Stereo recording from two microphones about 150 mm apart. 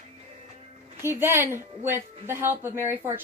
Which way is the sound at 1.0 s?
15° right (ahead or behind).